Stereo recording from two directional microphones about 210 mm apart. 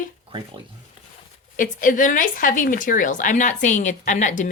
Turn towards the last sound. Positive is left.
turn(degrees=35)  # may be behind; listen again after turning